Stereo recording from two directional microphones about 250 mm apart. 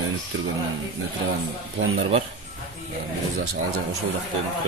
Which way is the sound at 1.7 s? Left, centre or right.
Right.